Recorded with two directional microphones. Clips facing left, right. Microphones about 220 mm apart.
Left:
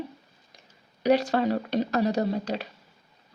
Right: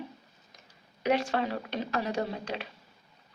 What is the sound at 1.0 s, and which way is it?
Speech, 35° left (ahead or behind).